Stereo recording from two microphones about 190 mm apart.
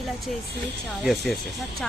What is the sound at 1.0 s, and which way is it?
Speech, centre (ahead or behind).